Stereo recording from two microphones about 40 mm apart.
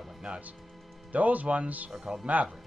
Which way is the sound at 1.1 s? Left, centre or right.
Right.